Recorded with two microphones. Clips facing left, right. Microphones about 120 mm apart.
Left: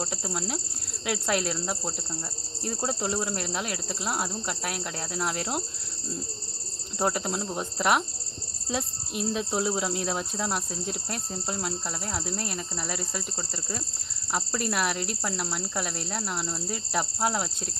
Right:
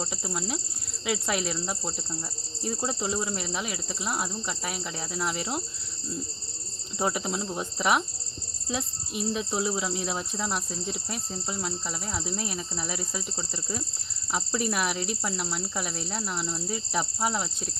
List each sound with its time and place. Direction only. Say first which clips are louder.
0.0 s speech: left 1 dB; 5° left (ahead or behind)
7.0 s speech: left 1 dB; centre (ahead or behind)
9.6 s speech: left 1 dB; 20° left (ahead or behind)
10.2 s speech: left 1 dB; 10° left (ahead or behind)
14.3 s speech: even; centre (ahead or behind)